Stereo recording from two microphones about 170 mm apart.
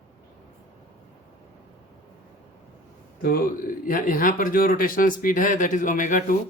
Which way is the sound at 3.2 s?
60° left (ahead or behind).